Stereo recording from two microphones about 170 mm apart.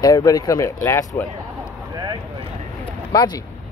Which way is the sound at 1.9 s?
25° right (ahead or behind).